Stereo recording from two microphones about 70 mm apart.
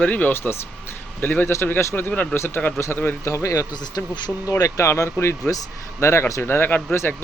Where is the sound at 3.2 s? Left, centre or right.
Left.